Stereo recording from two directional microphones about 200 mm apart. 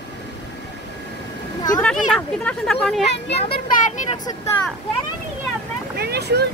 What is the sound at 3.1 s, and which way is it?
Speech, 55° left (ahead or behind).